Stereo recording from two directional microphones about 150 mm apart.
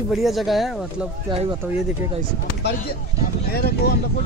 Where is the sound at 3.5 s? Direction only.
90° left.